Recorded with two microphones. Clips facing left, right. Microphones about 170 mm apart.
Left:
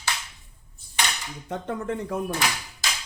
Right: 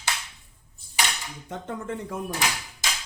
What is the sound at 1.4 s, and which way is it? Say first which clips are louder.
Speech: left 4 dB; 60° left (ahead or behind).